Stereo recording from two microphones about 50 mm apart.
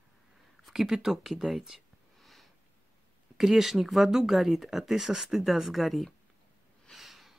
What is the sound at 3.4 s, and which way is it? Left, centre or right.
Speech, centre.